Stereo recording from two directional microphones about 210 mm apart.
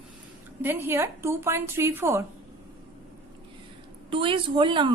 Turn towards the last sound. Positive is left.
turn(degrees=-25)  # may be behind; listen again after turning